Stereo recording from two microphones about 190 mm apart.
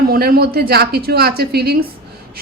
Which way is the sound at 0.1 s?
55° right (ahead or behind).